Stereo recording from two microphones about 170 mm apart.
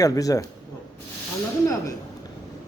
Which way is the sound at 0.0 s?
20° left (ahead or behind).